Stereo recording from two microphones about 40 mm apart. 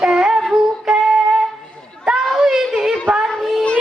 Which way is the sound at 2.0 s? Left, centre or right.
Centre.